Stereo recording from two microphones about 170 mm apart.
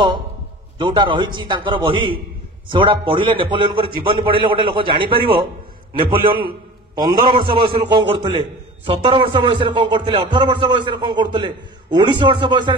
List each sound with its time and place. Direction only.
0.7 s a man's voice: 30° right (ahead or behind)